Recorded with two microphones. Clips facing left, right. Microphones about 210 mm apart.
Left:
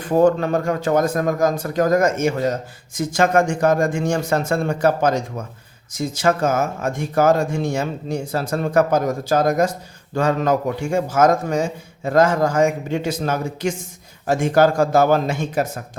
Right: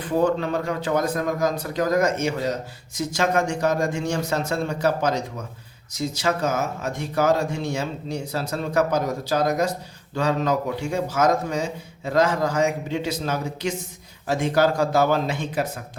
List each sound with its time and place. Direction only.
0.0 s speech: 45° left (ahead or behind)